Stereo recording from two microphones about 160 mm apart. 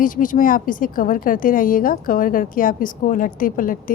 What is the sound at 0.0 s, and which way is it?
A woman's voice, 55° left (ahead or behind).